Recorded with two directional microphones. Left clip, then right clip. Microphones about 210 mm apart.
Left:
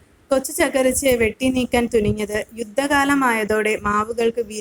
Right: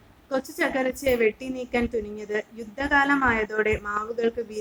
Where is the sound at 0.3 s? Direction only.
25° left (ahead or behind).